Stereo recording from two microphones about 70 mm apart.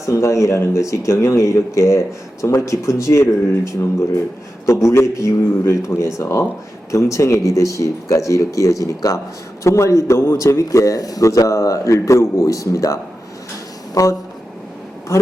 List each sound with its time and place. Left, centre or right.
0.0 s a man's voice: left
4.6 s a man's voice: left
15.1 s speech: left